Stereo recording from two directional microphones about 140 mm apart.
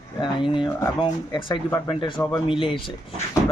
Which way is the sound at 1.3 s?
35° left (ahead or behind).